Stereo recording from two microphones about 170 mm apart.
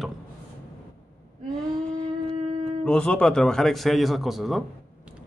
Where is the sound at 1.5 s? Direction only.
5° left (ahead or behind).